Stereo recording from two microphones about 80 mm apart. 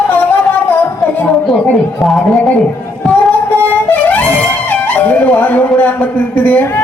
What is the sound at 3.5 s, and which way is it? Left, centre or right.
Music, left.